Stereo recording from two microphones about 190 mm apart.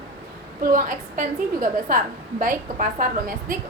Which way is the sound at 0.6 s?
45° right (ahead or behind).